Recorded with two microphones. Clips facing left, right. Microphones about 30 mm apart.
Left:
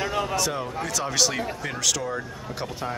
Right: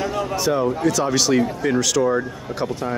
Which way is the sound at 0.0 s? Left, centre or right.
Left.